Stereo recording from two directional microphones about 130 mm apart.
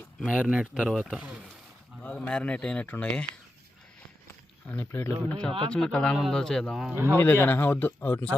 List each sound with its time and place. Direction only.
0.3 s a man's voice: 5° right (ahead or behind)
2.0 s a man's voice: 10° left (ahead or behind)
4.7 s a man's voice: 15° left (ahead or behind); by 6.9 s centre (ahead or behind)
6.9 s a man's voice: 20° right (ahead or behind)
7.2 s a man's voice: 15° left (ahead or behind)